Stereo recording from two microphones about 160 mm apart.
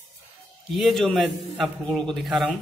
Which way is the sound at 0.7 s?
Centre (ahead or behind).